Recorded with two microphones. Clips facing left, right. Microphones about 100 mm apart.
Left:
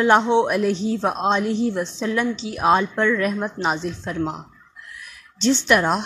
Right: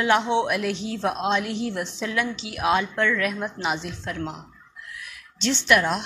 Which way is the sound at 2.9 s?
20° left (ahead or behind).